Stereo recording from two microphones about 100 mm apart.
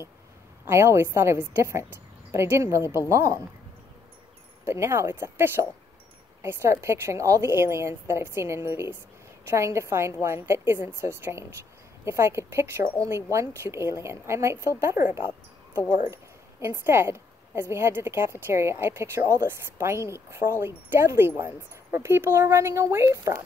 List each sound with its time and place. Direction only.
0.7 s a woman's voice: 25° right (ahead or behind)
4.6 s a woman's voice: 30° right (ahead or behind)